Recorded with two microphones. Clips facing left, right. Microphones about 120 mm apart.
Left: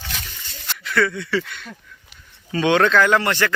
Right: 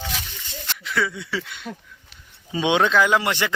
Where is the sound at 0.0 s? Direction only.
Centre (ahead or behind).